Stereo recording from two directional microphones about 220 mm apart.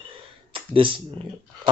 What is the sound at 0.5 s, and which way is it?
Speech, 25° right (ahead or behind).